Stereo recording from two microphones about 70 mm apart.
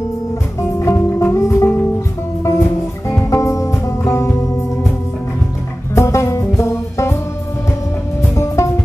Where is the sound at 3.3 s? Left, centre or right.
Left.